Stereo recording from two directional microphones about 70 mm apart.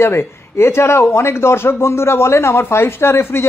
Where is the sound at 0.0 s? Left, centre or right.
Left.